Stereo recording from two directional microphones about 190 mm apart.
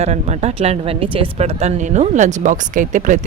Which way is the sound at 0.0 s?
35° right (ahead or behind).